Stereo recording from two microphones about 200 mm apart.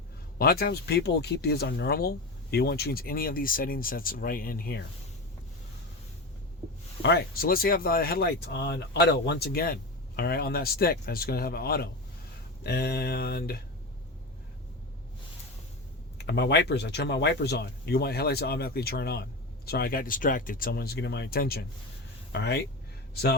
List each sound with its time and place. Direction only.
0.3 s speech: 50° left (ahead or behind)
7.0 s speech: 55° left (ahead or behind)
16.1 s speech: 55° left (ahead or behind)